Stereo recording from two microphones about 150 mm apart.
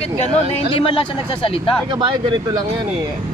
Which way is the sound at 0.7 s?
35° left (ahead or behind).